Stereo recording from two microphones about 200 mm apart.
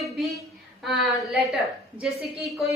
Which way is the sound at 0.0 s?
Centre (ahead or behind).